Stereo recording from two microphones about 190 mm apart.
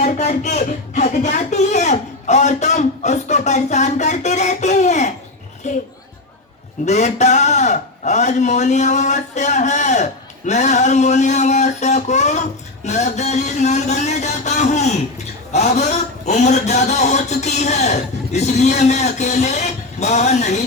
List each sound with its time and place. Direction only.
0.0 s speech: 35° left (ahead or behind)
6.8 s a man's voice: 35° left (ahead or behind)